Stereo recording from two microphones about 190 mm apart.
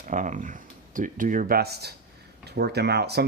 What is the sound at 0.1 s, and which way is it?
Speech, 40° right (ahead or behind).